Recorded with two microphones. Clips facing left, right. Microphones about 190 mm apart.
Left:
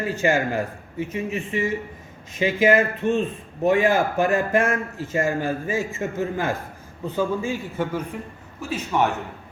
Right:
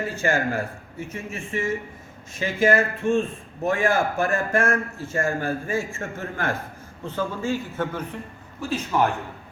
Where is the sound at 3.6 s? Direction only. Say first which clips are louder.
Left 3 dB; 20° left (ahead or behind).